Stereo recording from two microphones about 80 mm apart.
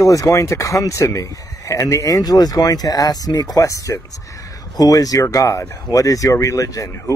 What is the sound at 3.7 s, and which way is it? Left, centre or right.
Speech, left.